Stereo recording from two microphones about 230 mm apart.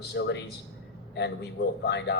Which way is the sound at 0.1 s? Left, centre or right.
Left.